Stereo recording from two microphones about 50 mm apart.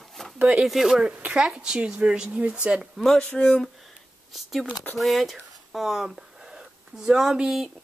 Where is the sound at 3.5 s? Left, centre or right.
Centre.